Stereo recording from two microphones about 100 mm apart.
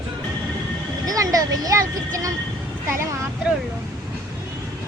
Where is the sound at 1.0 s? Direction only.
40° right (ahead or behind).